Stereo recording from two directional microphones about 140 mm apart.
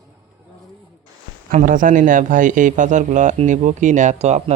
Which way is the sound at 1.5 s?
70° right (ahead or behind).